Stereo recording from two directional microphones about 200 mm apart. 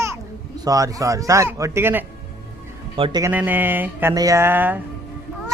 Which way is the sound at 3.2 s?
10° right (ahead or behind).